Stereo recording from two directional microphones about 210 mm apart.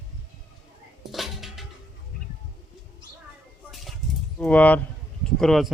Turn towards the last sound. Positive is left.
turn(degrees=0)  # may be behind; listen again after turning